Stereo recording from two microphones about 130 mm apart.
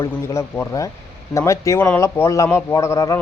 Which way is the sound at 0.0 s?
20° left (ahead or behind).